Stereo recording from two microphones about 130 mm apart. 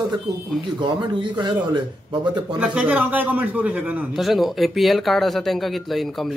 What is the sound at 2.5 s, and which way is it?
Speech, 10° right (ahead or behind).